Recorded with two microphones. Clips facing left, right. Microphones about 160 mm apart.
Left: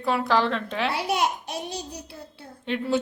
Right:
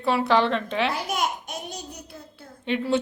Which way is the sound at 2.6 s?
Centre (ahead or behind).